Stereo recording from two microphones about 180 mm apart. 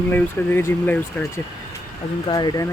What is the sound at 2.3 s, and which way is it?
Speech, 25° left (ahead or behind).